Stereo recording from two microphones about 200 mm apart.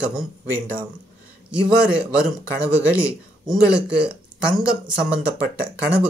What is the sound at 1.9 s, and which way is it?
Speech, 15° left (ahead or behind).